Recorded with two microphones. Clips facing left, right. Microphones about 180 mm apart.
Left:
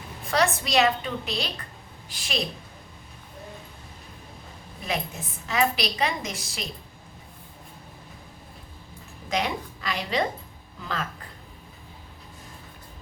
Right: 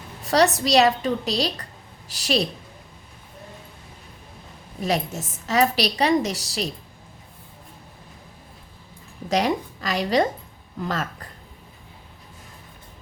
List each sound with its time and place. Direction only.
0.3 s a woman's voice: 40° right (ahead or behind)
4.8 s a woman's voice: 40° right (ahead or behind)
9.3 s a woman's voice: 40° right (ahead or behind)